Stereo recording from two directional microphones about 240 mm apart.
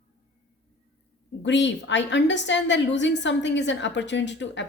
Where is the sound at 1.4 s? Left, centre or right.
Left.